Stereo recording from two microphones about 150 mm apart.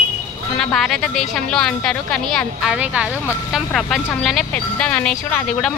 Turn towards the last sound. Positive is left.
turn(degrees=10)  # may be behind; listen again after turning